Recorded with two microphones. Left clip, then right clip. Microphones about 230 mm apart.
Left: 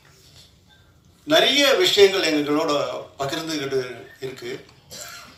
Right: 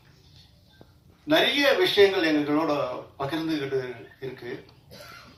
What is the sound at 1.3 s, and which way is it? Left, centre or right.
Speech, left.